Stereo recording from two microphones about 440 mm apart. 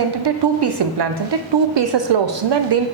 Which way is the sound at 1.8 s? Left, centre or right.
Right.